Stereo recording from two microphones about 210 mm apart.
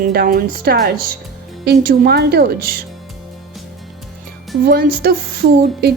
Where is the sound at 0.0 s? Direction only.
45° right (ahead or behind).